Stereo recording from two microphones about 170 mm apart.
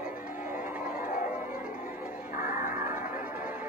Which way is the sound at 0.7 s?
10° right (ahead or behind).